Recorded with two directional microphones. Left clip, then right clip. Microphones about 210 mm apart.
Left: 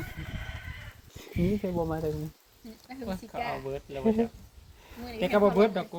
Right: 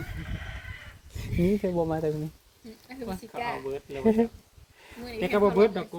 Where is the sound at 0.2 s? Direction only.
50° left (ahead or behind).